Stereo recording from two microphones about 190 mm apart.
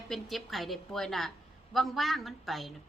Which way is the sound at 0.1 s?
Centre (ahead or behind).